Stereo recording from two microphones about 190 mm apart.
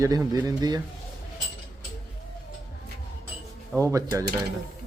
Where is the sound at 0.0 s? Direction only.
20° right (ahead or behind).